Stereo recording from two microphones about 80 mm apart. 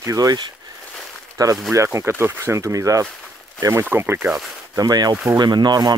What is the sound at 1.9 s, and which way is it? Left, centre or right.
Speech, right.